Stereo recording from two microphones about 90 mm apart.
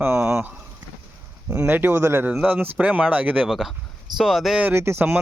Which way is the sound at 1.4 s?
20° right (ahead or behind).